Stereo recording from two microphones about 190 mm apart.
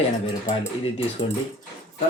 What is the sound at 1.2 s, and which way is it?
Speech, 25° left (ahead or behind).